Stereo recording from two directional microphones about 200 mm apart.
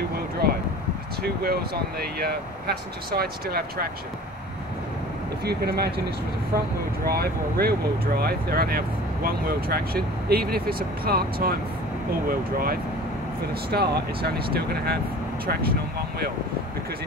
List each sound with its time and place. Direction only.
0.4 s vehicle: 50° right (ahead or behind)
1.2 s speech: 50° right (ahead or behind)
5.4 s speech: 55° right (ahead or behind)
7.1 s speech: 50° right (ahead or behind)